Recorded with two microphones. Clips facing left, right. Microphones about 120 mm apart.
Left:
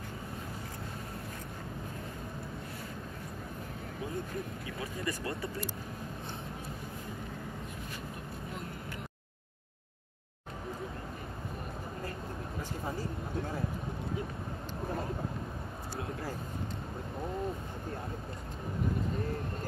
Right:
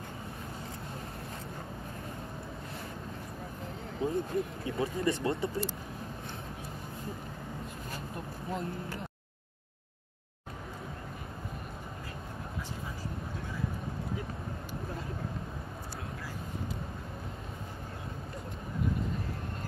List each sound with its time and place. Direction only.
4.0 s speech: 25° right (ahead or behind)